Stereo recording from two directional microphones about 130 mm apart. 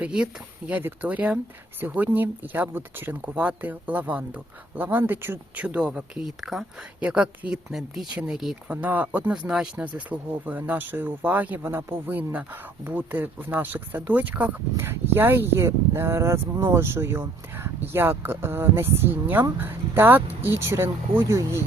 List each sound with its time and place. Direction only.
0.0 s speech: 5° right (ahead or behind)